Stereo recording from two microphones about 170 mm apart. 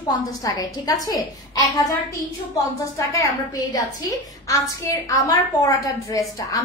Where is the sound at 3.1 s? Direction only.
20° left (ahead or behind).